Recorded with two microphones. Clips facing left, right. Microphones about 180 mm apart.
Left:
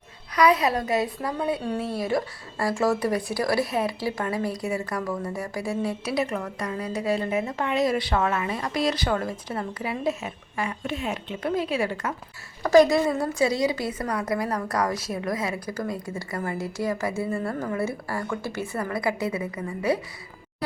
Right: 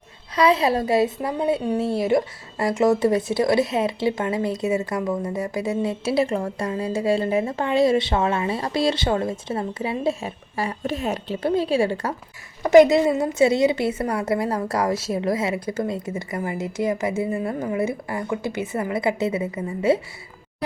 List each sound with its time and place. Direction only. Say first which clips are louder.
0.3 s speech: right 2 dB; 25° right (ahead or behind)